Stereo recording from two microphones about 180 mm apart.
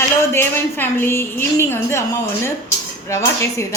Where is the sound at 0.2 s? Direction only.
10° left (ahead or behind).